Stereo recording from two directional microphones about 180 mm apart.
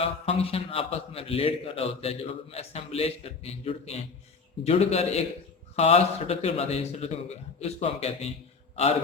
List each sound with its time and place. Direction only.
0.0 s a man's voice: 35° left (ahead or behind)